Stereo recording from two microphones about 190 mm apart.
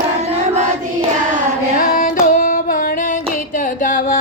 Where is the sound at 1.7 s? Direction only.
45° left (ahead or behind).